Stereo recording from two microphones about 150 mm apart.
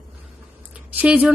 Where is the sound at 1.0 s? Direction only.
10° right (ahead or behind).